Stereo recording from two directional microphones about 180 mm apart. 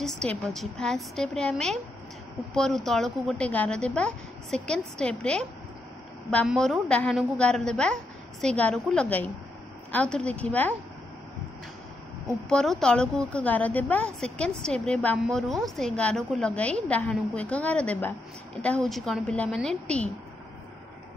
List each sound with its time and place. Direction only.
0.5 s a woman's voice: centre (ahead or behind)
12.4 s a woman's voice: 5° left (ahead or behind)